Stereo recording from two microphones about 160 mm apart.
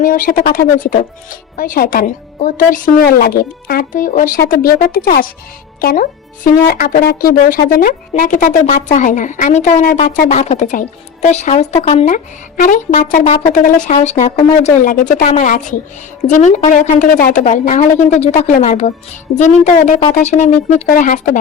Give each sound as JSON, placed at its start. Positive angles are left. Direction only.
{"t": 0.0, "sound": "a woman's voice", "side_deg": 60}
{"t": 12.1, "sound": "a woman's voice", "side_deg": 55}